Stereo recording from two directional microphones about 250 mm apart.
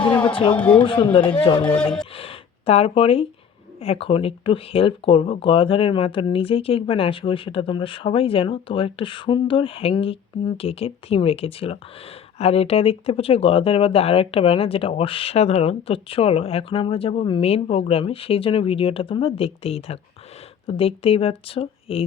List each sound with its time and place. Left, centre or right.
0.3 s speech: left
0.5 s speech: centre
0.8 s speech: centre